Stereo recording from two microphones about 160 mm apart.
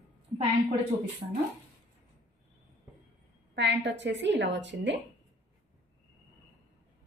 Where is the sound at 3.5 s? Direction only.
90° right.